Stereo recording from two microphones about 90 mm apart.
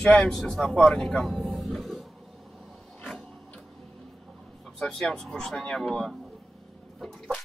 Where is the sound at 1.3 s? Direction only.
Centre (ahead or behind).